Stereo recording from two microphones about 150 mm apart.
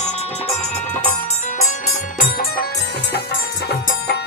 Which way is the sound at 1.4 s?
55° left (ahead or behind).